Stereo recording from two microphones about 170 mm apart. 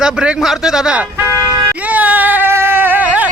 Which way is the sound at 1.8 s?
10° right (ahead or behind).